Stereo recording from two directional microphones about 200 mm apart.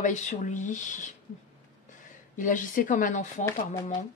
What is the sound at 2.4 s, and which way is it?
Speech, 40° left (ahead or behind).